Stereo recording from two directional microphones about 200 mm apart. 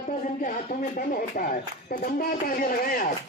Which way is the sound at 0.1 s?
40° left (ahead or behind).